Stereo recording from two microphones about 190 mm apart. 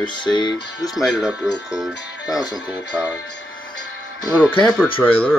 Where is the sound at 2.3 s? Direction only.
20° left (ahead or behind).